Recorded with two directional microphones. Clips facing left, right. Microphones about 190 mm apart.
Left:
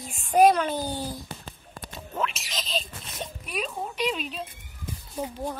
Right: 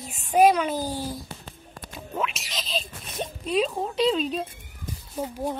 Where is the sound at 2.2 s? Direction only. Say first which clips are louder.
Even; centre (ahead or behind).